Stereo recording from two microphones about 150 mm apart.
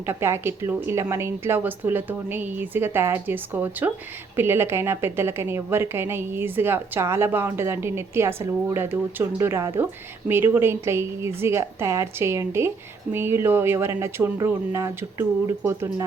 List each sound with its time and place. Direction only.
0.0 s a woman's voice: 15° right (ahead or behind)